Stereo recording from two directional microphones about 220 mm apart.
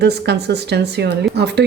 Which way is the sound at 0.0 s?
50° right (ahead or behind).